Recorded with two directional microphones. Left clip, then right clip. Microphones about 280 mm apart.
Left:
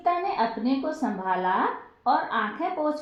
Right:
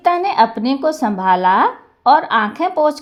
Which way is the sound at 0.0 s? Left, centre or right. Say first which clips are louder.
Right 11 dB; right.